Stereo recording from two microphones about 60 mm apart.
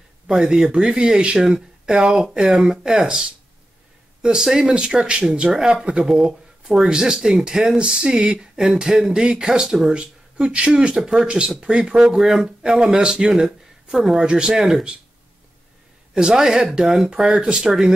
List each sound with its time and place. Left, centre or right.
0.3 s speech: centre
16.2 s speech: centre